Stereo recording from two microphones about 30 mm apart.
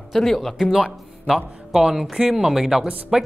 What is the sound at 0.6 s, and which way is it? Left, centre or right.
Speech, centre.